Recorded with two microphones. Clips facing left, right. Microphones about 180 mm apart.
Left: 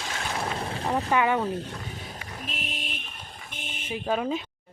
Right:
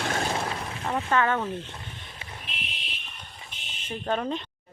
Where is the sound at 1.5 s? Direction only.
40° left (ahead or behind).